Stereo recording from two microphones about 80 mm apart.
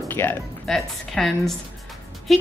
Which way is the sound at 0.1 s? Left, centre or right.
Left.